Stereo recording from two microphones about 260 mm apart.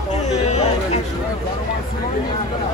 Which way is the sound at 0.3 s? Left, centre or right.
Left.